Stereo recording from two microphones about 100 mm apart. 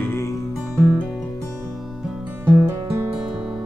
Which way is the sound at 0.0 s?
25° left (ahead or behind).